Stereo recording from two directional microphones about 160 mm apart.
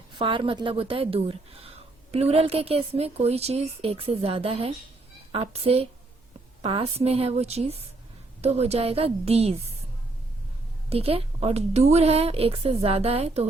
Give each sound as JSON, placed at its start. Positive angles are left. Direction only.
{"t": 0.2, "sound": "a woman's voice", "side_deg": -35}
{"t": 10.8, "sound": "a woman's voice", "side_deg": -40}